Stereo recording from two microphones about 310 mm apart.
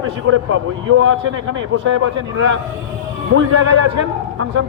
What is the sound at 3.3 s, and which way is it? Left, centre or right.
Speech, right.